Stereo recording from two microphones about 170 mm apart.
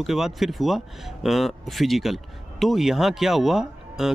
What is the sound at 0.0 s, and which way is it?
Speech, centre (ahead or behind).